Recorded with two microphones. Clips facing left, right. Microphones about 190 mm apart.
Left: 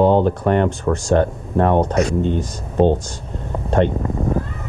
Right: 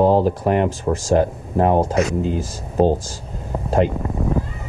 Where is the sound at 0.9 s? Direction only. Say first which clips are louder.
Right 1 dB; 25° right (ahead or behind).